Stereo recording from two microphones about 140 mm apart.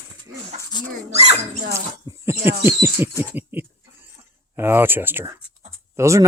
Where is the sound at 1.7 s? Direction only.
20° right (ahead or behind).